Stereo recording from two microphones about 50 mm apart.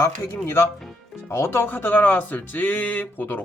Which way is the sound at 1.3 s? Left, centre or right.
Left.